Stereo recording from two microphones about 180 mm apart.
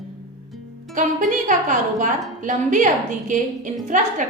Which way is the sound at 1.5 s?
45° right (ahead or behind).